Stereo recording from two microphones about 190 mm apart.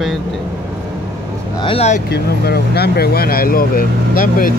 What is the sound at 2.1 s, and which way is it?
Speech, 55° left (ahead or behind).